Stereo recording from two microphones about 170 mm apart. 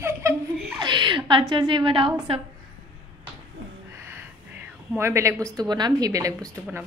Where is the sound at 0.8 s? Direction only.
25° right (ahead or behind).